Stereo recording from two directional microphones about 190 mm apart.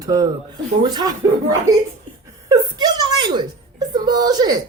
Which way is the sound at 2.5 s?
20° right (ahead or behind).